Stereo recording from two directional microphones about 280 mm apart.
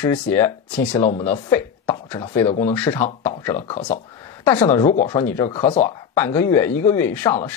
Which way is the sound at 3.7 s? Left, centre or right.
Left.